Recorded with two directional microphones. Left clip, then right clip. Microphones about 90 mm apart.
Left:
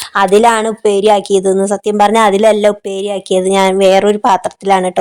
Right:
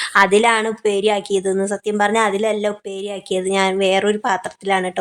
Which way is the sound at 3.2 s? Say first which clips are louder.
Left 7 dB; 90° left.